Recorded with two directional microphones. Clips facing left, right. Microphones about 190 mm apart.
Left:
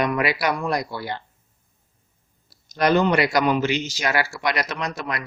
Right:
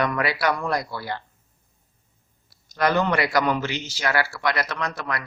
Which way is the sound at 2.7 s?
20° left (ahead or behind).